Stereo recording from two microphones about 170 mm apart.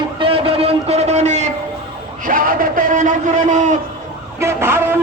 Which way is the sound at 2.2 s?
55° right (ahead or behind).